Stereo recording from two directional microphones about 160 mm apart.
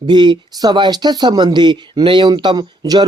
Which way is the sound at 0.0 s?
30° right (ahead or behind).